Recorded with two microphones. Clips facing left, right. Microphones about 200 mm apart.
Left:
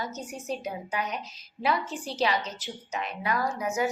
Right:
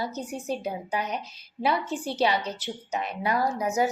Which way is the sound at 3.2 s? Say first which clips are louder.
Right 3 dB; 30° right (ahead or behind).